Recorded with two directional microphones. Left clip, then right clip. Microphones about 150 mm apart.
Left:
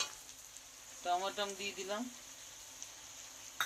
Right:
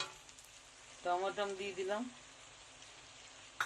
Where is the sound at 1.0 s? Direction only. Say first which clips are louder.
Even; 20° right (ahead or behind).